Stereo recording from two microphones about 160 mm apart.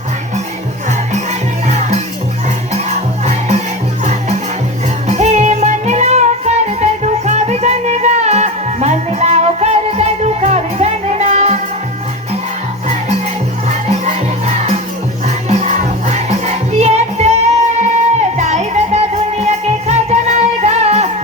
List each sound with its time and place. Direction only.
0.9 s music: 45° right (ahead or behind)
4.0 s music: 45° right (ahead or behind)
13.9 s music: 40° right (ahead or behind)